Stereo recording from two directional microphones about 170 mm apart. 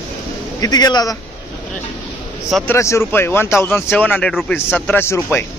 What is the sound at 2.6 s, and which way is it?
Speech, 15° left (ahead or behind).